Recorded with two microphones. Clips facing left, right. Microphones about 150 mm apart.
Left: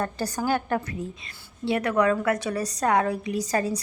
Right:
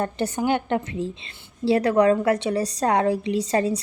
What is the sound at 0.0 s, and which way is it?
A woman's voice, 25° right (ahead or behind).